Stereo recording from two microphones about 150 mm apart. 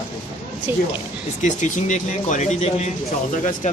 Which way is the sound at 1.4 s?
55° left (ahead or behind).